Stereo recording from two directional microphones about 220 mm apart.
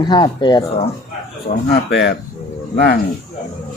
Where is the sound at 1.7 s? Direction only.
50° left (ahead or behind).